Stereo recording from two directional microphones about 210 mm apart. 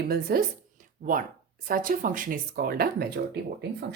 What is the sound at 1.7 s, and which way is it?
Speech, 40° right (ahead or behind).